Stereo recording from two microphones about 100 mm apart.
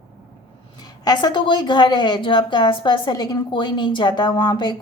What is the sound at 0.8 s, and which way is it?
A woman's voice, 40° left (ahead or behind).